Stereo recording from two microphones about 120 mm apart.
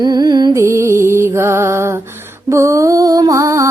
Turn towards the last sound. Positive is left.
turn(degrees=-25)  # may be behind; listen again after turning